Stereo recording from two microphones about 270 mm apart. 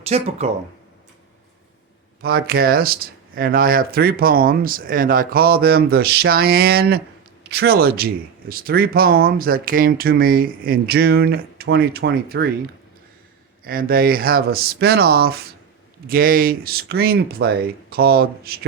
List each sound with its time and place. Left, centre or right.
0.0 s speech: right
2.2 s speech: right
13.7 s speech: right